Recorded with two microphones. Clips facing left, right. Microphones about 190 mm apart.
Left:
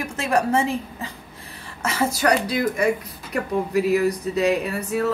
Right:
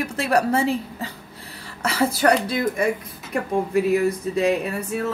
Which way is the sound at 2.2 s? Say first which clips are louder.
Right 2 dB; 40° right (ahead or behind).